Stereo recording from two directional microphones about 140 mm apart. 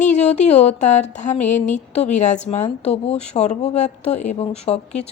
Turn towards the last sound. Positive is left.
turn(degrees=50)  # may be behind; listen again after turning